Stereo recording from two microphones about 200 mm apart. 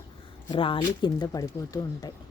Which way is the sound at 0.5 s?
25° left (ahead or behind).